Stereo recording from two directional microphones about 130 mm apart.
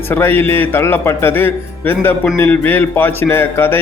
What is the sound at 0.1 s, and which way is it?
Speech, 15° left (ahead or behind).